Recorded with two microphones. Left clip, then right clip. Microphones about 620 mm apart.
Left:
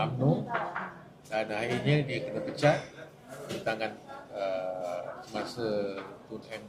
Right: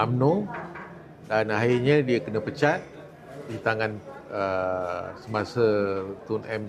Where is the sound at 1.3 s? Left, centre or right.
Right.